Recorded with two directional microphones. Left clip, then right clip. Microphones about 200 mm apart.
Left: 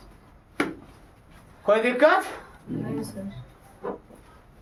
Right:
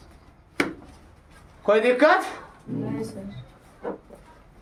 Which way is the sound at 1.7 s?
25° right (ahead or behind).